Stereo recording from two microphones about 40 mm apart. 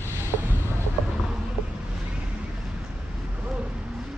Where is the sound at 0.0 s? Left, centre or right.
Right.